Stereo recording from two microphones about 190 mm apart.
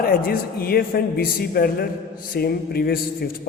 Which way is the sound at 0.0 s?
50° left (ahead or behind).